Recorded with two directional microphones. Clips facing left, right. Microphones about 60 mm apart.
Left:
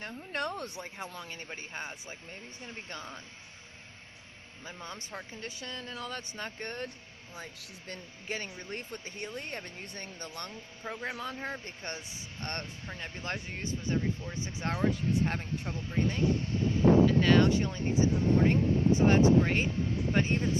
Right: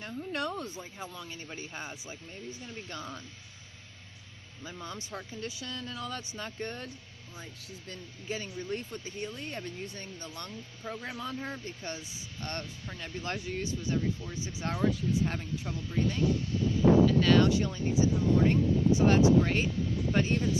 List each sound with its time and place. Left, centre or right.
0.3 s speech: left
0.6 s speech: left
1.1 s speech: left
4.8 s speech: left
7.3 s speech: left
10.8 s speech: left
11.6 s speech: left